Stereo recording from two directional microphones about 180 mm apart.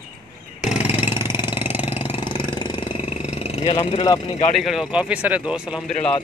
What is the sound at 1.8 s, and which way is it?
Engine, 30° left (ahead or behind).